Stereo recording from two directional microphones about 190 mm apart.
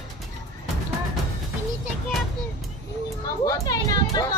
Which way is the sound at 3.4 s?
20° left (ahead or behind).